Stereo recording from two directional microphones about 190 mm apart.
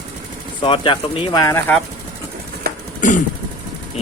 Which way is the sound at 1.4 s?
15° left (ahead or behind).